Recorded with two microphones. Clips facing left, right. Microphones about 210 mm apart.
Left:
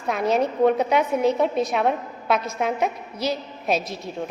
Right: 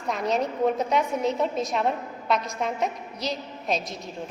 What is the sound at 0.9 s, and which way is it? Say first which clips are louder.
Speech: left 4 dB; 5° left (ahead or behind).